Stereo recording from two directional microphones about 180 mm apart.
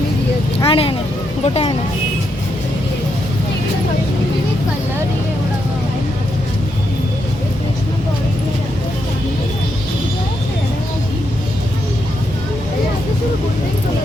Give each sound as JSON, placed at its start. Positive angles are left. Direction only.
{"t": 0.6, "sound": "speech", "side_deg": 30}